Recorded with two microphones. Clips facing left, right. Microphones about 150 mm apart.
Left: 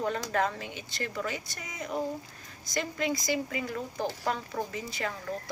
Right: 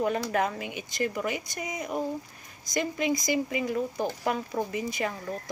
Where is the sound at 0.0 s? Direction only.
15° right (ahead or behind).